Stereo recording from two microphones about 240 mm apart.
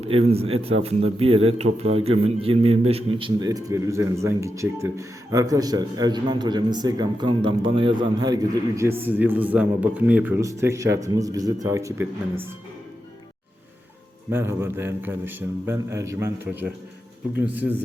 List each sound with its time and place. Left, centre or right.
0.0 s a man's voice: right; by 12.5 s centre
14.3 s a man's voice: centre